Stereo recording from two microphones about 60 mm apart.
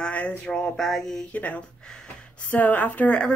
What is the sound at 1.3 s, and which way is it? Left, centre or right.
Speech, left.